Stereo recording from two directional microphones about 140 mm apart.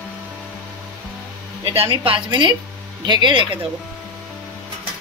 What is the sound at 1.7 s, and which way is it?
A woman's voice, 40° right (ahead or behind).